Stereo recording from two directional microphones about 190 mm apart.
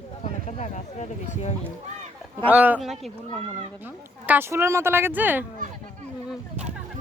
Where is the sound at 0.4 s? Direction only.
40° left (ahead or behind).